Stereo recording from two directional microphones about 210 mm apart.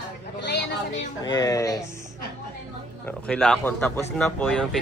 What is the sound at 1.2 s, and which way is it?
Speech, 20° left (ahead or behind).